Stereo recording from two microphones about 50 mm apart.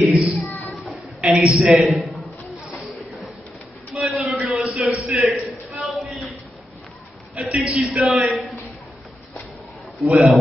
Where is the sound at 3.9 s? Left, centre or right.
Right.